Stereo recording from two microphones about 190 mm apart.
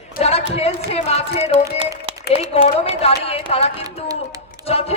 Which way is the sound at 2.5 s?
30° left (ahead or behind).